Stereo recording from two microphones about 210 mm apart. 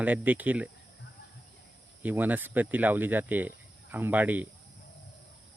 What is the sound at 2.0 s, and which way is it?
Speech, 10° right (ahead or behind).